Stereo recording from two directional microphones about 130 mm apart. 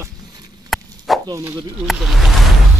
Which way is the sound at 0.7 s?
Centre (ahead or behind).